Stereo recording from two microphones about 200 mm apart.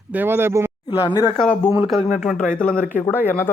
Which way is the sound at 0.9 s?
20° left (ahead or behind).